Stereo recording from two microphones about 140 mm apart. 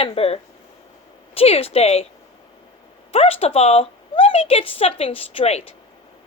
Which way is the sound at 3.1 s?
45° left (ahead or behind).